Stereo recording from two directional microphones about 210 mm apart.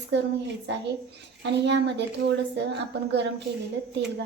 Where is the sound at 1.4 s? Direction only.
55° right (ahead or behind).